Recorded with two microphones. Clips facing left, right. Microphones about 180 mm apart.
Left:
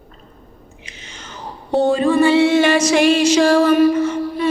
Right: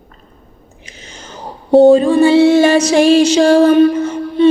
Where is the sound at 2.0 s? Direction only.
25° right (ahead or behind).